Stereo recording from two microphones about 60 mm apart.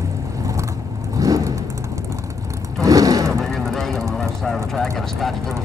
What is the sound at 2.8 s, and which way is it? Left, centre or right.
Vehicle, right.